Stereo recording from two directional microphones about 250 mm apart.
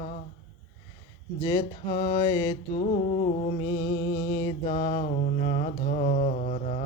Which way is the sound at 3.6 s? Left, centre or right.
Left.